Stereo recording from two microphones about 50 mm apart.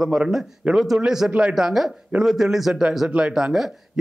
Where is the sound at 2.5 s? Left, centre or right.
Centre.